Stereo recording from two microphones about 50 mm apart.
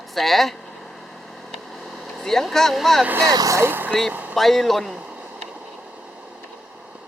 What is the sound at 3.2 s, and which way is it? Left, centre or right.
Speech, right.